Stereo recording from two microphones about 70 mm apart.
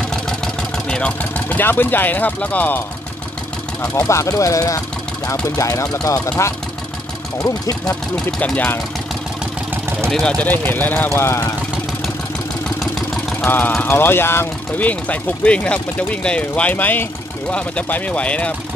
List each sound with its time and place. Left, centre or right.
0.8 s speech: centre
3.8 s speech: left
10.4 s speech: left
11.1 s speech: left
12.6 s vehicle: centre
13.5 s speech: left
14.8 s speech: left